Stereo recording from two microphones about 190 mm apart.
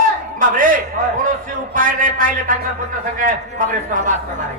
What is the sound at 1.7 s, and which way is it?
Speech, 45° right (ahead or behind).